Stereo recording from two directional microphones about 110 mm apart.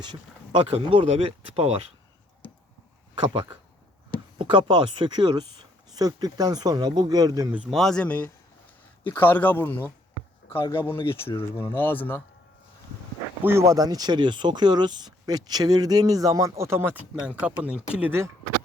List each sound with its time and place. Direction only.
0.0 s speech: 45° right (ahead or behind); by 1.8 s 65° right (ahead or behind)
4.4 s speech: 50° right (ahead or behind)
7.7 s speech: centre (ahead or behind); by 12.2 s 20° left (ahead or behind)
13.4 s speech: 20° right (ahead or behind)